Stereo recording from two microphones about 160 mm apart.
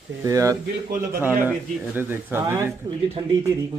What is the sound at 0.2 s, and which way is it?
Speech, 20° right (ahead or behind).